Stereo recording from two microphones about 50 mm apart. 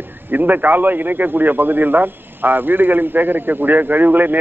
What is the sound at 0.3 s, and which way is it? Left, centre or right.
A man's voice, right.